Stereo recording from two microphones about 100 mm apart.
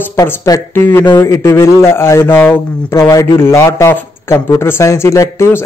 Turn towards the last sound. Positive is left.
turn(degrees=30)  # may be behind; listen again after turning